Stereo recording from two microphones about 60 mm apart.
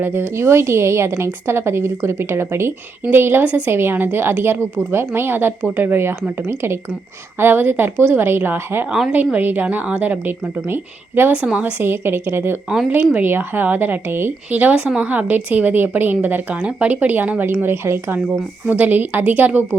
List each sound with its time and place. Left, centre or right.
0.0 s a woman's voice: right
8.9 s a woman's voice: centre
9.1 s a woman's voice: right
14.8 s a woman's voice: centre
15.3 s speech: right
17.4 s a woman's voice: right
18.6 s speech: right